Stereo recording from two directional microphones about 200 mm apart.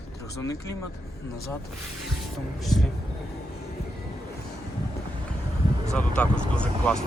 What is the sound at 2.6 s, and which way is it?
Speech, centre (ahead or behind).